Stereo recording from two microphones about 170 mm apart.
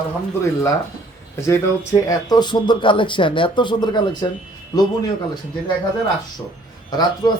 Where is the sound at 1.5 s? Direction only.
20° left (ahead or behind).